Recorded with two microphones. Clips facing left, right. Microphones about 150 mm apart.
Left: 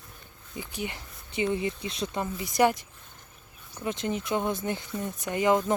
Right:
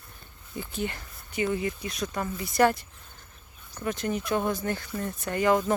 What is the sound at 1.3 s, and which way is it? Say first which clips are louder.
Speech: even; 25° left (ahead or behind).